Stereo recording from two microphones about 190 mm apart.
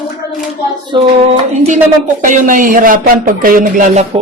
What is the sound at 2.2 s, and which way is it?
Speech, 45° right (ahead or behind).